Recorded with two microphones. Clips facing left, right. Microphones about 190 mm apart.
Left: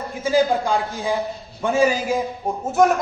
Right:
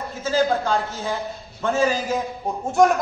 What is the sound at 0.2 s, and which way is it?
A man's voice, 15° left (ahead or behind).